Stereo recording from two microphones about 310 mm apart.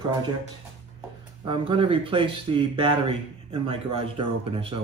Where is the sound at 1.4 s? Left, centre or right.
Centre.